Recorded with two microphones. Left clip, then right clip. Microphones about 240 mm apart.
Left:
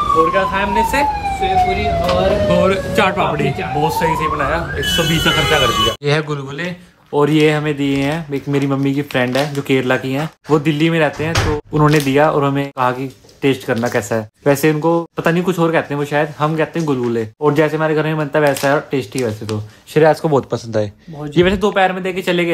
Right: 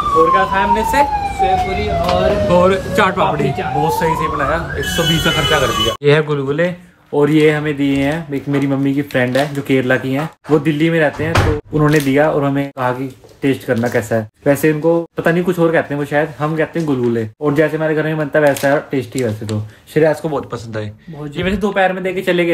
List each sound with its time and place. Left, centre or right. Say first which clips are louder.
0.0 s speech: right 2 dB; centre
6.0 s speech: right 5 dB; centre